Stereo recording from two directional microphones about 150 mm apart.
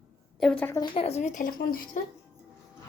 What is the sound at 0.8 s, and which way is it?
Speech, 35° left (ahead or behind).